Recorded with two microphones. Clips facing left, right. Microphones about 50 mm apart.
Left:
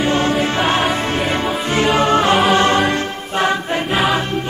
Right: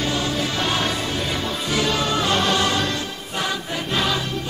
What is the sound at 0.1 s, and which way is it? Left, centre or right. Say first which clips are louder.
Music: left 7 dB; left.